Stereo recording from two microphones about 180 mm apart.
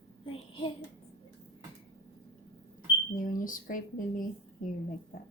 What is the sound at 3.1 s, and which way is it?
Speech, 50° left (ahead or behind).